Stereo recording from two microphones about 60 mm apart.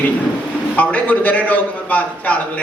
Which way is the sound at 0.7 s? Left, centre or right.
Left.